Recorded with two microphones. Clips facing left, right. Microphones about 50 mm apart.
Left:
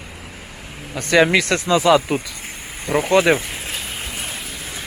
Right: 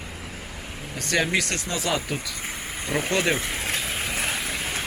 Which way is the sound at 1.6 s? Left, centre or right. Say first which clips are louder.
Left 12 dB; left.